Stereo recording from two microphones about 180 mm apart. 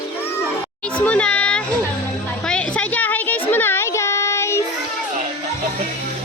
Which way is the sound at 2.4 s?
5° left (ahead or behind).